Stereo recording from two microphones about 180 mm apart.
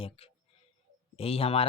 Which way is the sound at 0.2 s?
30° left (ahead or behind).